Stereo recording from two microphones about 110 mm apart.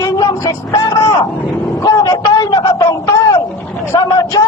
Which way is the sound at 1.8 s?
35° left (ahead or behind).